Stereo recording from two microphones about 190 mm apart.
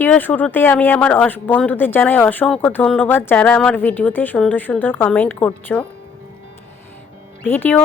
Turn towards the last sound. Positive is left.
turn(degrees=10)  # may be behind; listen again after turning